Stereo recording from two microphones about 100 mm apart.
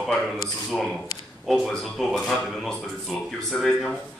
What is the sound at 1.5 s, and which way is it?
Speech, centre (ahead or behind).